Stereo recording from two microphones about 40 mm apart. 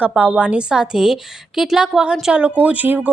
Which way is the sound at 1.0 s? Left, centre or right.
Centre.